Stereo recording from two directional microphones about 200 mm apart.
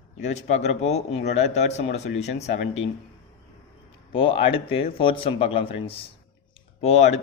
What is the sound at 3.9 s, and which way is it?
A man's voice, 25° left (ahead or behind).